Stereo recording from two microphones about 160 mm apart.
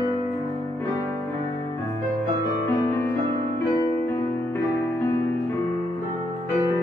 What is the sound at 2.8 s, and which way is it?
Music, 15° left (ahead or behind).